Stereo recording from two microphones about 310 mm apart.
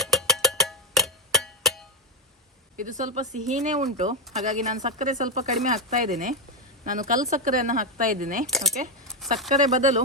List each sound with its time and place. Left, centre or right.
0.0 s music: centre
2.7 s speech: right
8.4 s speech: centre
9.5 s speech: right